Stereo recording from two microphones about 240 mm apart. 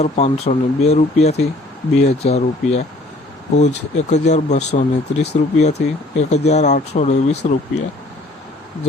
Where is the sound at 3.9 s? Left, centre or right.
Left.